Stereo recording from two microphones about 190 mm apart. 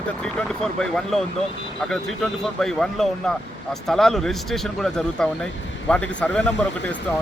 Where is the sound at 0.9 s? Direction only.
Centre (ahead or behind).